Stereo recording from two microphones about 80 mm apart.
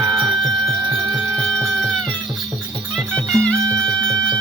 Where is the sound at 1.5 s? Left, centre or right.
Right.